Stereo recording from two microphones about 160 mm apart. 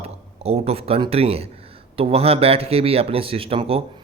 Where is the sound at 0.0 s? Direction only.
40° right (ahead or behind).